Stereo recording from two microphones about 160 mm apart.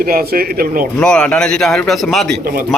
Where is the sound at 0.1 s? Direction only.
65° right (ahead or behind).